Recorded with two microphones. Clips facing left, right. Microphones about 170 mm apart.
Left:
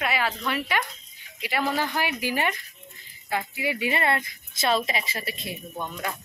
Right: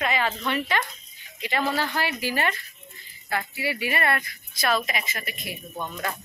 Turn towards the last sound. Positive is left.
turn(degrees=10)  # may be behind; listen again after turning